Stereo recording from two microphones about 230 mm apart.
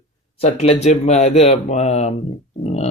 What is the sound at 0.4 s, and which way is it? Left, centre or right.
Speech, left.